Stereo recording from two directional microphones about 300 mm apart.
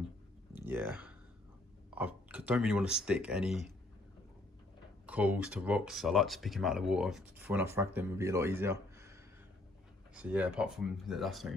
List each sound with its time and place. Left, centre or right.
0.6 s speech: centre
5.0 s speech: centre
10.1 s speech: centre